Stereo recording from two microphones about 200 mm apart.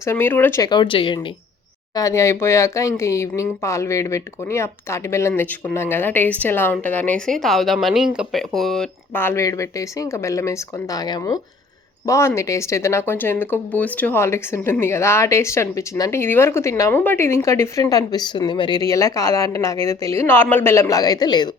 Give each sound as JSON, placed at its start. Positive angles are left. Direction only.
{"t": 0.0, "sound": "speech", "side_deg": 10}